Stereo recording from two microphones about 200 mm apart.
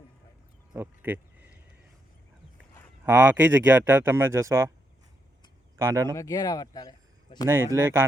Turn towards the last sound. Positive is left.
turn(degrees=-10)  # may be behind; listen again after turning